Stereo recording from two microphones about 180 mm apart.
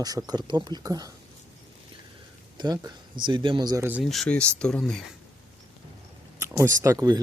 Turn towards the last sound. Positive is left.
turn(degrees=-20)  # may be behind; listen again after turning